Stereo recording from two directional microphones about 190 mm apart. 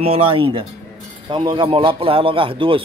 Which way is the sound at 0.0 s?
30° right (ahead or behind).